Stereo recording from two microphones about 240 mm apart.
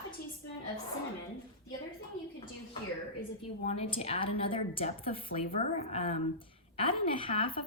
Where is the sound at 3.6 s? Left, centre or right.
Left.